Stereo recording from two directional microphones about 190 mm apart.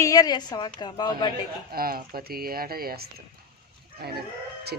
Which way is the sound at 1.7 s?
50° right (ahead or behind).